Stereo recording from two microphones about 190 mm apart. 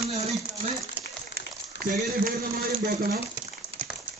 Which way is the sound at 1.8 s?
45° right (ahead or behind).